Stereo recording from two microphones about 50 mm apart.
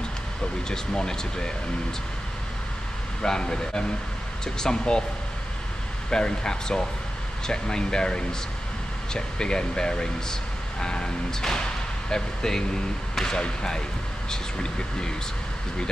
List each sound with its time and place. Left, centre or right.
0.7 s speech: centre
3.2 s speech: centre
6.0 s speech: centre